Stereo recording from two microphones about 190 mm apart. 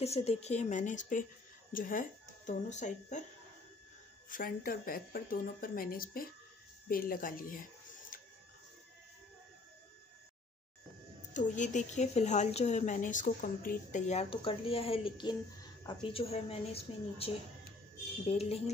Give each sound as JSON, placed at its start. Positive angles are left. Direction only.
{"t": 0.0, "sound": "speech", "side_deg": 35}
{"t": 4.3, "sound": "speech", "side_deg": 45}
{"t": 8.1, "sound": "printer", "side_deg": 45}
{"t": 11.3, "sound": "a woman's voice", "side_deg": 40}